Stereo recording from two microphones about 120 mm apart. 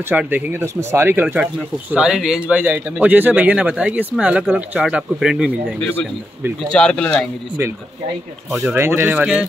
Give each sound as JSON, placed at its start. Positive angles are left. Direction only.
{"t": 0.1, "sound": "speech", "side_deg": -15}
{"t": 6.7, "sound": "speech", "side_deg": 5}
{"t": 8.5, "sound": "speech", "side_deg": -5}
{"t": 8.7, "sound": "speech", "side_deg": -20}
{"t": 9.1, "sound": "speech", "side_deg": -10}